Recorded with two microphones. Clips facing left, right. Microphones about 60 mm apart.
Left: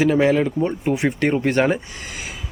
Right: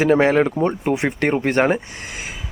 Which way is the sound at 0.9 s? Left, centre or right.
Right.